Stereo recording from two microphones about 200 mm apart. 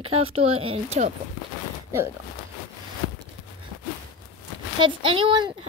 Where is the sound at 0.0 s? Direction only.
30° right (ahead or behind).